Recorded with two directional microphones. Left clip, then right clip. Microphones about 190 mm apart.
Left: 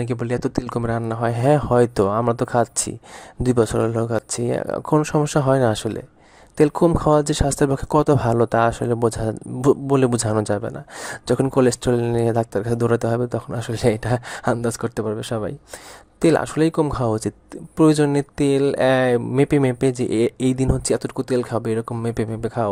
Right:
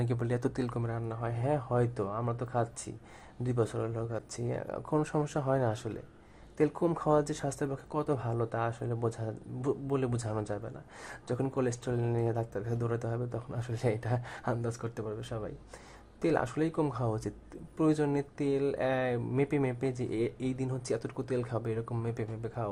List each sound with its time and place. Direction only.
0.0 s speech: 30° left (ahead or behind); by 22.7 s 50° left (ahead or behind)